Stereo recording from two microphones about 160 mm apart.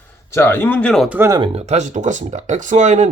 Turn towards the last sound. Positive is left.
turn(degrees=-50)  # may be behind; listen again after turning